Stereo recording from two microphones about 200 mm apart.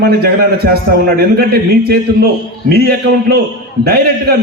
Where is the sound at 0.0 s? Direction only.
50° right (ahead or behind).